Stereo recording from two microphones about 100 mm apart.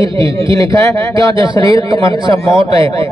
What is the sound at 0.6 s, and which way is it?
A man's voice, 35° left (ahead or behind).